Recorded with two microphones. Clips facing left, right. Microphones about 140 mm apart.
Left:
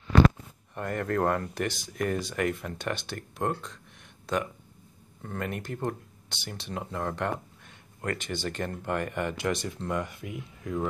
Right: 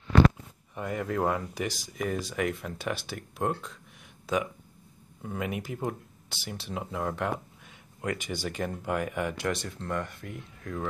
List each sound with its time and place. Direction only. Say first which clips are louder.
0.7 s speech: left 2 dB; 5° right (ahead or behind)